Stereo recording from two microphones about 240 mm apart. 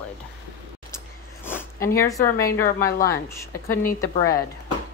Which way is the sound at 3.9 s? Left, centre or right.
Left.